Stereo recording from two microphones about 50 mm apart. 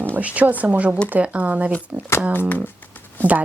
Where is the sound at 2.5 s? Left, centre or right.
Left.